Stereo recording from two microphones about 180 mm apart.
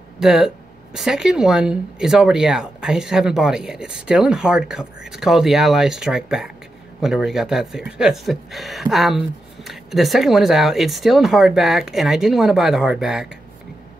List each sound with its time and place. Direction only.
0.2 s speech: centre (ahead or behind)